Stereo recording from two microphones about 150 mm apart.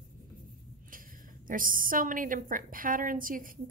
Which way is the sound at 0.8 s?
65° right (ahead or behind).